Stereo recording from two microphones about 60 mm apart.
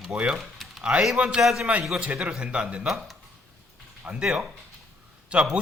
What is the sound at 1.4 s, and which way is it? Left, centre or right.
Speech, centre.